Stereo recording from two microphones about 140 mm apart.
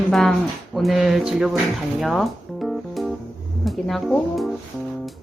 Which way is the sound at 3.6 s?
Centre (ahead or behind).